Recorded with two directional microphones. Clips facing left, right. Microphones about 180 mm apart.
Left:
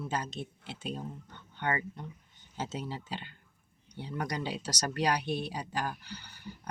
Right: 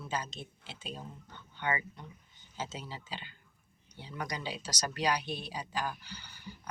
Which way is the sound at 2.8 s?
55° left (ahead or behind).